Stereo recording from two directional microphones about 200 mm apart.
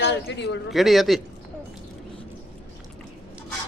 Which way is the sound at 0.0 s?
60° left (ahead or behind).